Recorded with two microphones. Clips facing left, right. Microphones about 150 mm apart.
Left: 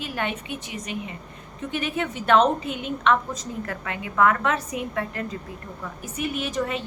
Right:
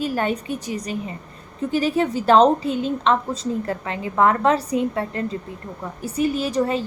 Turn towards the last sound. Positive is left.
turn(degrees=-35)  # may be behind; listen again after turning